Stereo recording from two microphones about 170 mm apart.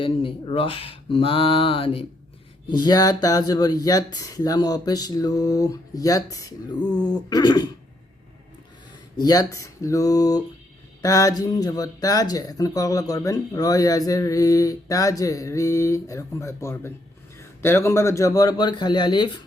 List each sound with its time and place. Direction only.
0.0 s speech: 30° left (ahead or behind)
9.1 s speech: 25° left (ahead or behind)